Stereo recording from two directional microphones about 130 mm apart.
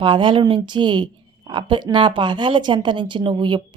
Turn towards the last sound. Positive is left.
turn(degrees=-35)  # may be behind; listen again after turning